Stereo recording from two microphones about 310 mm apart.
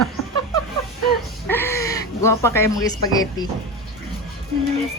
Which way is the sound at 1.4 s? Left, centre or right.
Centre.